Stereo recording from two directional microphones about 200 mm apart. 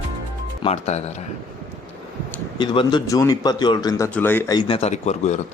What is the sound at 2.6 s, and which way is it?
Speech, 25° left (ahead or behind).